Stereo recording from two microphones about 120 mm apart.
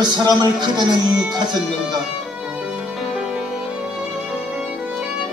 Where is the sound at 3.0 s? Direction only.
5° right (ahead or behind).